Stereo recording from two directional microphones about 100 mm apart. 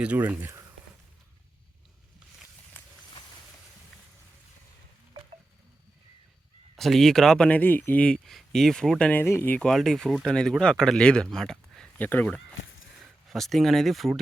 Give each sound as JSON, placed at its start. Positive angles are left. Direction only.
{"t": 0.0, "sound": "speech", "side_deg": -15}
{"t": 6.7, "sound": "a man's voice", "side_deg": 0}
{"t": 9.2, "sound": "speech", "side_deg": 20}
{"t": 9.6, "sound": "a man's voice", "side_deg": 0}
{"t": 11.9, "sound": "speech", "side_deg": 15}
{"t": 13.0, "sound": "speech", "side_deg": 0}